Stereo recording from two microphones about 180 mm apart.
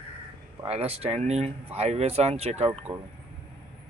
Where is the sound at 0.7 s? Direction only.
35° right (ahead or behind).